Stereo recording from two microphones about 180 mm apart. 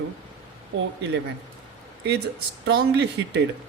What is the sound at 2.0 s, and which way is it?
Speech, 70° right (ahead or behind).